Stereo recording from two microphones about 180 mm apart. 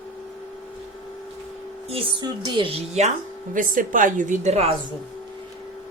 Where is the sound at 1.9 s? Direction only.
30° right (ahead or behind).